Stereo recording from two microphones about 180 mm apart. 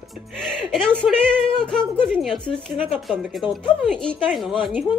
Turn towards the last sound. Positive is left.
turn(degrees=-5)  # may be behind; listen again after turning